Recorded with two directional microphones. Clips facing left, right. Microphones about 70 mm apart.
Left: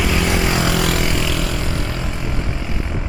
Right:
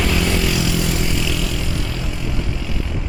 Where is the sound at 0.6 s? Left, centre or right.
Left.